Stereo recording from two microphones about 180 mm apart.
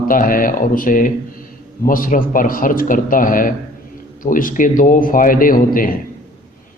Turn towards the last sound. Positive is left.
turn(degrees=50)  # may be behind; listen again after turning